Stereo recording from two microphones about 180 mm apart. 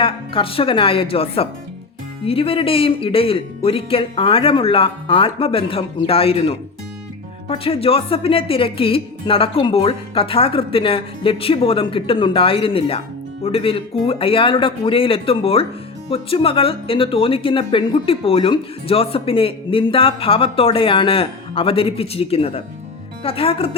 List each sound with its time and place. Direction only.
0.0 s speech: 30° left (ahead or behind)